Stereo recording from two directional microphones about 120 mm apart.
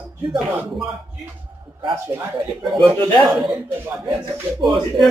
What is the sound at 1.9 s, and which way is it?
Speech, 20° right (ahead or behind).